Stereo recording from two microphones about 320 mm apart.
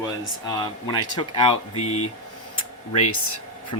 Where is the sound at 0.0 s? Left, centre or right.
Centre.